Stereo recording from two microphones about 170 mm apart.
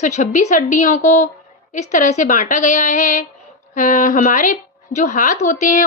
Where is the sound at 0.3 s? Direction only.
50° left (ahead or behind).